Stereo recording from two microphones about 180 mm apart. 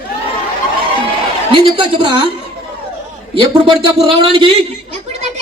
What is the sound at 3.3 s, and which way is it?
A man's voice, 30° right (ahead or behind).